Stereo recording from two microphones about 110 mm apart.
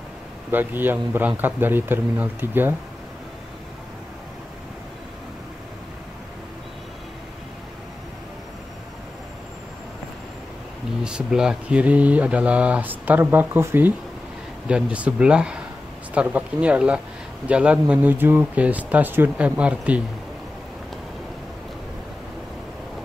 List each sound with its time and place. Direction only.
0.5 s speech: 20° right (ahead or behind)
11.1 s speech: 5° right (ahead or behind)